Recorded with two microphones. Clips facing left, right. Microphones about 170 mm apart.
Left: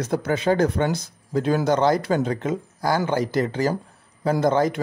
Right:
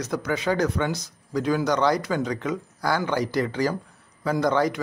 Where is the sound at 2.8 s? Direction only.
45° left (ahead or behind).